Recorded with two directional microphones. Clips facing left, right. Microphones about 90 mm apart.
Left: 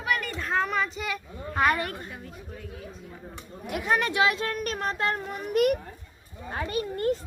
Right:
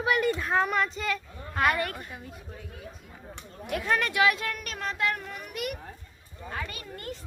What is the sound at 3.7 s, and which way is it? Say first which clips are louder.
A child's voice: left 2 dB; 20° left (ahead or behind).